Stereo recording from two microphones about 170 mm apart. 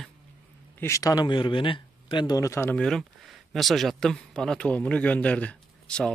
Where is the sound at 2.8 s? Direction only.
Centre (ahead or behind).